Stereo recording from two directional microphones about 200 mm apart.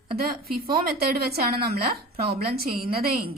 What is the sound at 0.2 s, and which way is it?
A woman's voice, 50° right (ahead or behind).